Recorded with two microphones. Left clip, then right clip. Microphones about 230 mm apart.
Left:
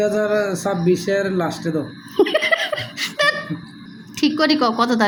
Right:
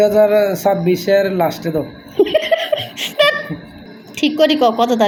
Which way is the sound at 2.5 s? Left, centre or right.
Left.